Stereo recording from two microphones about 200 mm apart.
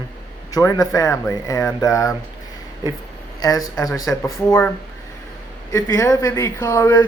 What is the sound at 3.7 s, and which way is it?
Speech, 20° left (ahead or behind).